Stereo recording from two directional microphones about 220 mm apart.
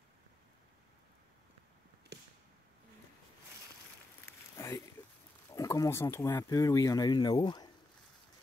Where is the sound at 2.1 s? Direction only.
50° right (ahead or behind).